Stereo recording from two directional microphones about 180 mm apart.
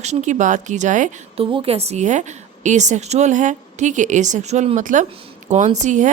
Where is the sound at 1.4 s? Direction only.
30° right (ahead or behind).